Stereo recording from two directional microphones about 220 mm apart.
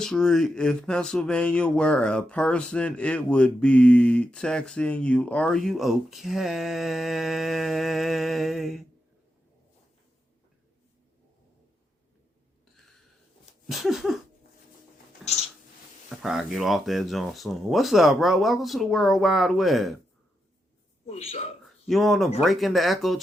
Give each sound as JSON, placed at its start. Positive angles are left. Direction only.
{"t": 0.0, "sound": "speech", "side_deg": 5}
{"t": 13.7, "sound": "speech", "side_deg": 0}
{"t": 16.0, "sound": "speech", "side_deg": 0}
{"t": 21.1, "sound": "a man's voice", "side_deg": 30}
{"t": 21.8, "sound": "speech", "side_deg": 0}